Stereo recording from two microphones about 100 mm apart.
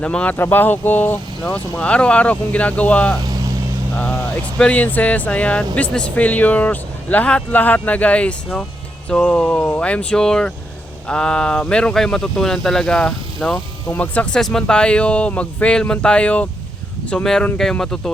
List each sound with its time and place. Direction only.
0.0 s speech: 10° left (ahead or behind)
0.3 s speech: 20° left (ahead or behind)
4.5 s speech: 15° left (ahead or behind)